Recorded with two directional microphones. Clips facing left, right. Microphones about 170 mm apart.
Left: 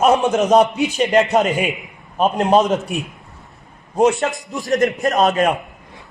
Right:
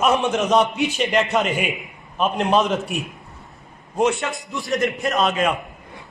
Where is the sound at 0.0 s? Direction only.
40° left (ahead or behind).